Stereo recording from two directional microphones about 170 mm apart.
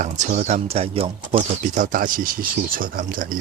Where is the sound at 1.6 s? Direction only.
45° right (ahead or behind).